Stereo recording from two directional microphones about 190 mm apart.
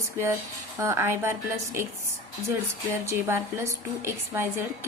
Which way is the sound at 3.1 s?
15° right (ahead or behind).